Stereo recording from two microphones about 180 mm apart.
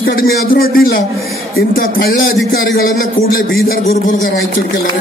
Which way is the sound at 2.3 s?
75° left (ahead or behind).